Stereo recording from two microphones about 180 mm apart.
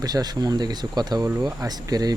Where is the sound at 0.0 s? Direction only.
20° right (ahead or behind).